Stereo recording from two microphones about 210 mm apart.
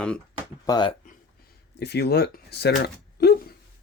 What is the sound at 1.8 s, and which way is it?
Speech, 50° left (ahead or behind).